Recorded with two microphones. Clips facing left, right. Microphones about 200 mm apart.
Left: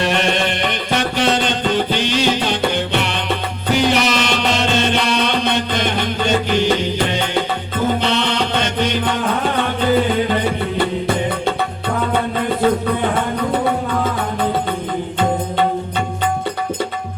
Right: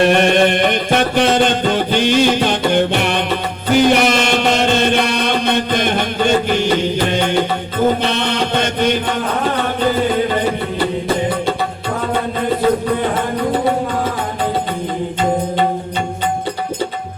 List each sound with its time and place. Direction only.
0.0 s music: 55° right (ahead or behind)
8.0 s music: 50° right (ahead or behind)